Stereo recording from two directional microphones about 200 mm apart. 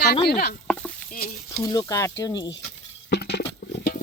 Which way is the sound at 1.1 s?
50° left (ahead or behind).